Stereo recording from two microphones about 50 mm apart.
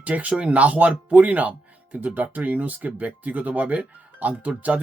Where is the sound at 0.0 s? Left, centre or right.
Right.